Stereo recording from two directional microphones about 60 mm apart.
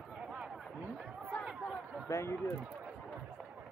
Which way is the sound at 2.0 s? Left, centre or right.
Left.